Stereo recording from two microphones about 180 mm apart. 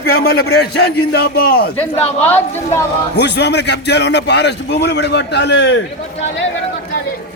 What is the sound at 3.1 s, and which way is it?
A man's voice, 70° left (ahead or behind).